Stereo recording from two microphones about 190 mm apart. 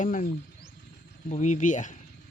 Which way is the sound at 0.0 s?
45° left (ahead or behind).